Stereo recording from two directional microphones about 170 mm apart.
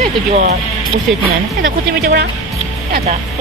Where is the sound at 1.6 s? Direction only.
55° right (ahead or behind).